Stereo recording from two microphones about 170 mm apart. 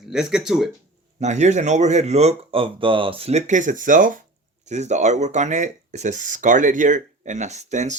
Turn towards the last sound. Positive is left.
turn(degrees=-45)  # may be behind; listen again after turning